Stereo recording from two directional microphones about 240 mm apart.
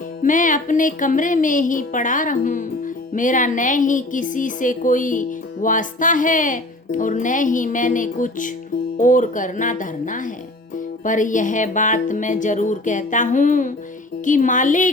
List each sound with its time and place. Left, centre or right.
0.2 s music: left